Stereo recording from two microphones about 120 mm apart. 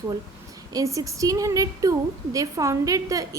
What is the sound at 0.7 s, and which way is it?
A woman's voice, 30° right (ahead or behind).